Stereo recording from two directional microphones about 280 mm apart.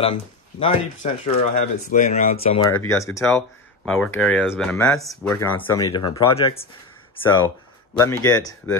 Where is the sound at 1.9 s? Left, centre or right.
Left.